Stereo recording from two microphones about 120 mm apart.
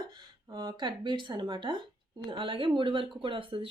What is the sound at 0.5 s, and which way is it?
Speech, 35° right (ahead or behind).